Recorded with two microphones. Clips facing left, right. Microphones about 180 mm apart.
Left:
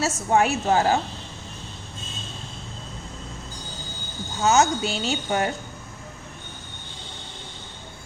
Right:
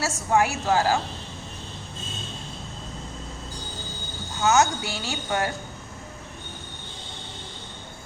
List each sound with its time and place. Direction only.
0.0 s speech: 20° left (ahead or behind)
4.4 s speech: 20° left (ahead or behind)